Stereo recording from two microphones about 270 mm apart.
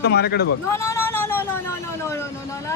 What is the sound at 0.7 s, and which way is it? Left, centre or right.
Speech, centre.